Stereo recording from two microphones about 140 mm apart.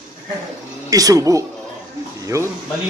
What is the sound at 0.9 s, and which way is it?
A man's voice, 25° right (ahead or behind).